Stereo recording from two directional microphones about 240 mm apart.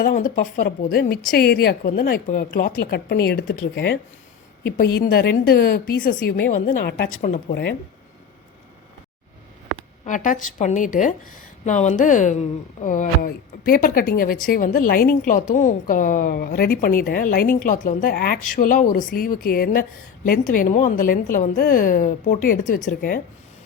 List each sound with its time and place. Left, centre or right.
0.0 s a woman's voice: left
7.1 s a woman's voice: left
9.7 s a woman's voice: left